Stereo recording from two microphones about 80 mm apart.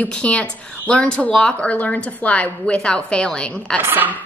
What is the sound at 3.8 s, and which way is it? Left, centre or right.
Speech, right.